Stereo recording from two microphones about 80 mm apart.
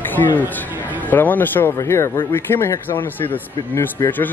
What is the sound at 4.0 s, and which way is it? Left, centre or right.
Speech, left.